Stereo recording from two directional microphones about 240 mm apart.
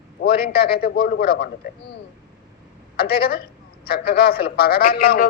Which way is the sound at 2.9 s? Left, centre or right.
Left.